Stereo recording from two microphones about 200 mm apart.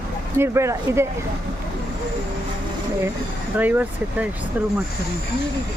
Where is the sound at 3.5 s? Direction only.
10° right (ahead or behind).